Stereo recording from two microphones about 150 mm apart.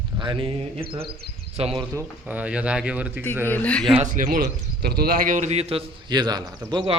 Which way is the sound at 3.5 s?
10° left (ahead or behind).